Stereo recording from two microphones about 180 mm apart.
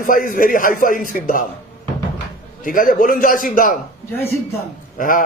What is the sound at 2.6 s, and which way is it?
A man's voice, 50° left (ahead or behind).